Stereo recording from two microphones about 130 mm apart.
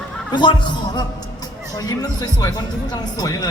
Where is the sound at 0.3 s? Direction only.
35° left (ahead or behind).